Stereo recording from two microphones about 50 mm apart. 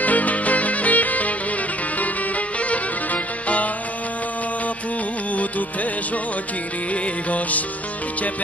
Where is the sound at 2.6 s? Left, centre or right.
Left.